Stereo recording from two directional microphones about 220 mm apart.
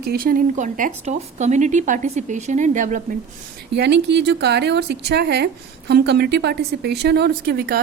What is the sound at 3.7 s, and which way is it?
A woman's voice, 50° right (ahead or behind).